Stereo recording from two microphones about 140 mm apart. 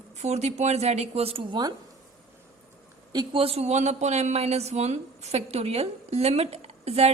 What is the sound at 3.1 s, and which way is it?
A woman's voice, 40° right (ahead or behind).